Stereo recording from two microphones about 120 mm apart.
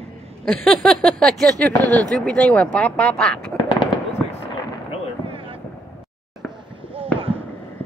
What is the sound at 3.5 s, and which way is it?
Fireworks, 40° left (ahead or behind).